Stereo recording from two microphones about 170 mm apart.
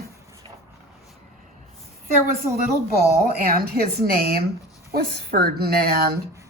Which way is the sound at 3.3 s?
65° right (ahead or behind).